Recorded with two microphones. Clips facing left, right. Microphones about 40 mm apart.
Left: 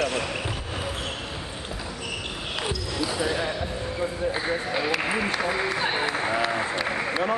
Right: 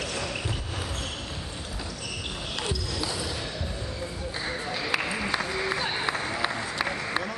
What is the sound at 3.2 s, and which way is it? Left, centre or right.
Basketball bounce, left.